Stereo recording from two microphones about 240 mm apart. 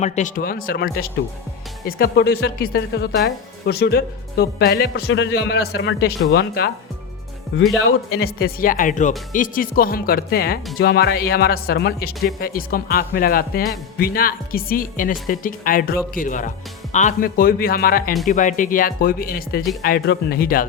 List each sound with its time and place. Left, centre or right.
0.0 s speech: left
5.0 s a man's voice: left
7.9 s speech: left